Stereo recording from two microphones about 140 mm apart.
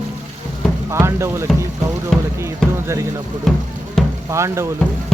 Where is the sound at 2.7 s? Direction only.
20° right (ahead or behind).